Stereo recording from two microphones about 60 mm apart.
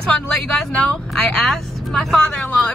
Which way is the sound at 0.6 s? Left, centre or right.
Centre.